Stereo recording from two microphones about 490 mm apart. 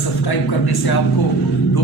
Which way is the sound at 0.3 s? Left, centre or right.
Left.